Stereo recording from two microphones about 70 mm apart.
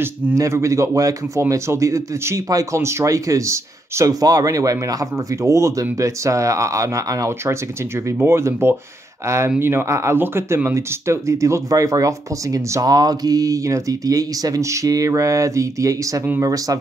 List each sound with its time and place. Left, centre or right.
0.4 s speech: right
7.4 s speech: right